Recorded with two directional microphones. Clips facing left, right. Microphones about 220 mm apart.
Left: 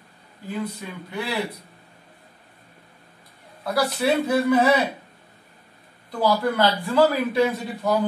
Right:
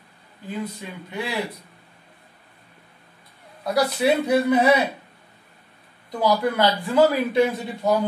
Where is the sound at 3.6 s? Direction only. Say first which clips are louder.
Right 2 dB; 20° right (ahead or behind).